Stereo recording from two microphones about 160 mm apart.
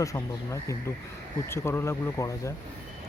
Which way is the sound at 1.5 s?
15° left (ahead or behind).